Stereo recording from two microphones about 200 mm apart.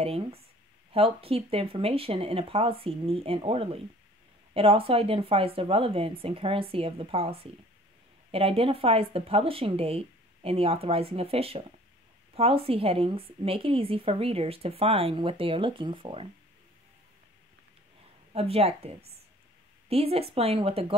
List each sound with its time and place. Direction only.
0.0 s a sound: 30° right (ahead or behind)
0.9 s a woman's voice: 30° right (ahead or behind)
18.3 s a woman's voice: 30° right (ahead or behind)